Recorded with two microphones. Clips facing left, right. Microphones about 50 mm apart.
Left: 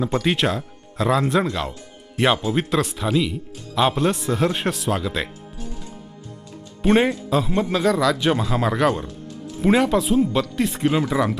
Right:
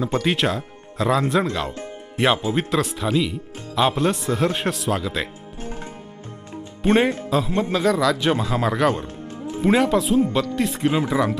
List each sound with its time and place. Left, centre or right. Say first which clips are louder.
0.0 s speech: even; centre
5.5 s music: right 4 dB; right
6.8 s speech: left 1 dB; centre
9.2 s music: right 4 dB; right
9.6 s speech: even; centre